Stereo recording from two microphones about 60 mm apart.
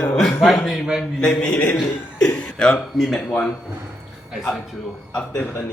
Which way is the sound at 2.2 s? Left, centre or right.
Centre.